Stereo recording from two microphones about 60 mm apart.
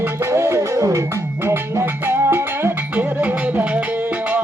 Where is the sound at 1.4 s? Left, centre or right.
Right.